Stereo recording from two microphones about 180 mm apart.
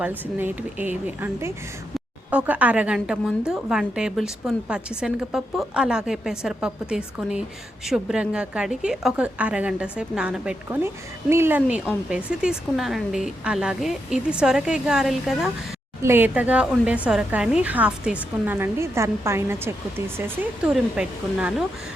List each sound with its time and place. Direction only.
0.3 s a woman's voice: 10° right (ahead or behind)